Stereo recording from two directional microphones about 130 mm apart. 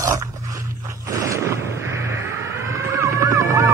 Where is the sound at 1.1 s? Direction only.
25° right (ahead or behind).